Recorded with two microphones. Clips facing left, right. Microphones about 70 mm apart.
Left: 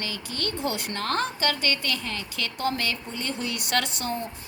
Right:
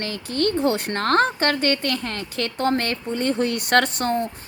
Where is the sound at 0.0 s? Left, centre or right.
Right.